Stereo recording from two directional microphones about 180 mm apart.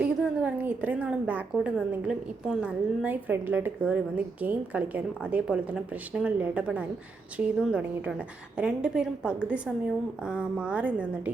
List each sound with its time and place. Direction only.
0.0 s a woman's voice: 5° right (ahead or behind)